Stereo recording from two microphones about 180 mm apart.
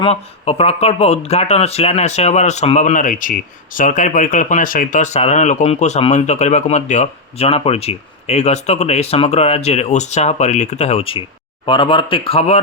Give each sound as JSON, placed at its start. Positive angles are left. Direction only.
{"t": 0.0, "sound": "speech", "side_deg": 35}